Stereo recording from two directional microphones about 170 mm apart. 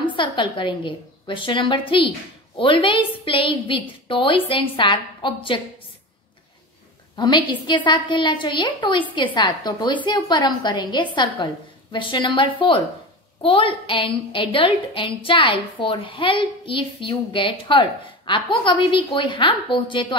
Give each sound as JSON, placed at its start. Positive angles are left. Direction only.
{"t": 0.1, "sound": "a woman's voice", "side_deg": 30}
{"t": 7.2, "sound": "a woman's voice", "side_deg": 25}